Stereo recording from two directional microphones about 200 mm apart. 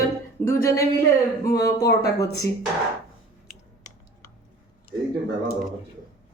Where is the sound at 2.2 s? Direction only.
15° left (ahead or behind).